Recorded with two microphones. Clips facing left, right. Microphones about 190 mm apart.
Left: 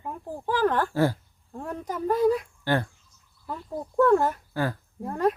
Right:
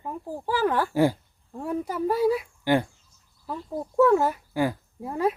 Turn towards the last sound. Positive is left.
turn(degrees=-5)  # may be behind; listen again after turning